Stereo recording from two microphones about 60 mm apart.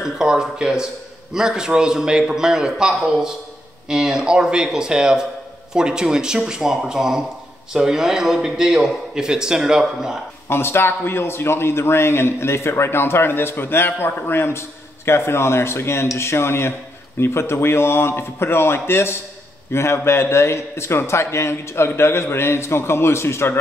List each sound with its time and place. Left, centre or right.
0.0 s a man's voice: centre
10.5 s a man's voice: left